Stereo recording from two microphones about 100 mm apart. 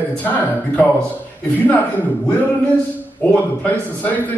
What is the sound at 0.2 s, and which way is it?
Speech, 15° left (ahead or behind).